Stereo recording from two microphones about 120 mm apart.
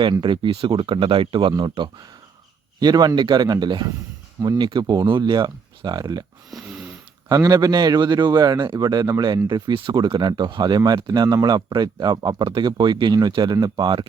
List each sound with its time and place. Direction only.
0.0 s speech: 40° right (ahead or behind)
6.5 s snoring: 5° right (ahead or behind)
7.3 s speech: 35° right (ahead or behind)